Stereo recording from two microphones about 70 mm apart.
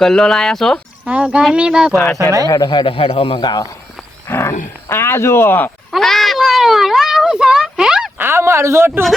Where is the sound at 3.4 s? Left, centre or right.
Left.